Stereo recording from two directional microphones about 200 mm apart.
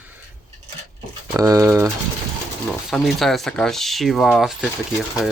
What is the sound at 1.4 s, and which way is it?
Speech, 15° right (ahead or behind).